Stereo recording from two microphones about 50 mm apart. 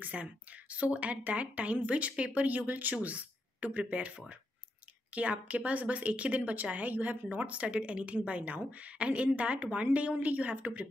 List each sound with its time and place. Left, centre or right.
0.0 s a woman's voice: right